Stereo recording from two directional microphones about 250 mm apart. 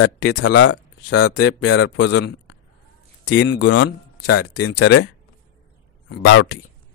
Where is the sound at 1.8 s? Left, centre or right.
Left.